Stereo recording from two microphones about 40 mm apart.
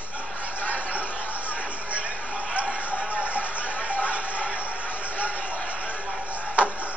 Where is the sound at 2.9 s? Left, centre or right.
Right.